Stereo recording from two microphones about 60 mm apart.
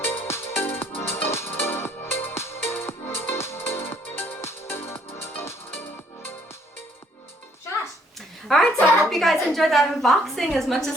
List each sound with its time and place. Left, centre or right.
0.0 s music: left
8.4 s a woman's voice: centre